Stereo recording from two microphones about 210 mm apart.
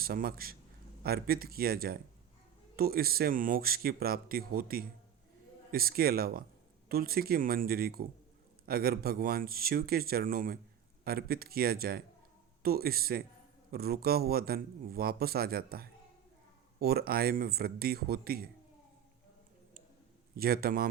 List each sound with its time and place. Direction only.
0.0 s a man's voice: 45° right (ahead or behind)
20.3 s a man's voice: 45° right (ahead or behind)